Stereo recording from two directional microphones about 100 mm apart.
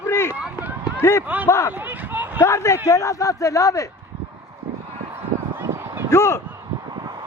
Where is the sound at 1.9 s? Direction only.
20° right (ahead or behind).